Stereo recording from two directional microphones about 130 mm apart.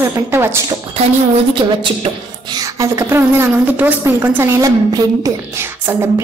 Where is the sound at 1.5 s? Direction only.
40° right (ahead or behind).